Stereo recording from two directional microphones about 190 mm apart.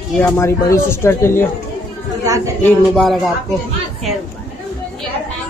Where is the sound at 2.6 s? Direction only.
Centre (ahead or behind).